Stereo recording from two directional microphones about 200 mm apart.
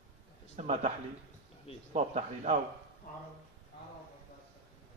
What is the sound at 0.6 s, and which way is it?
Speech, 35° right (ahead or behind).